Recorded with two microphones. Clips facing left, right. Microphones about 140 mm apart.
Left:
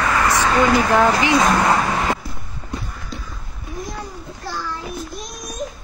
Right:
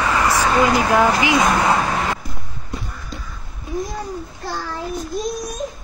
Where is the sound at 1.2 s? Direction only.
15° right (ahead or behind).